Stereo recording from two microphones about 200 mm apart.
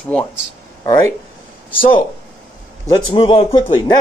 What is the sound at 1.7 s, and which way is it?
Speech, 25° left (ahead or behind).